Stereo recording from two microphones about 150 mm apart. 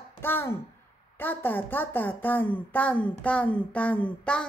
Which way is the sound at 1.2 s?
15° left (ahead or behind).